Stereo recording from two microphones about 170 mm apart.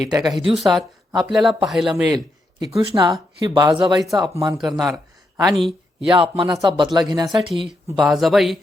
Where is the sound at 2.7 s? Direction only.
20° right (ahead or behind).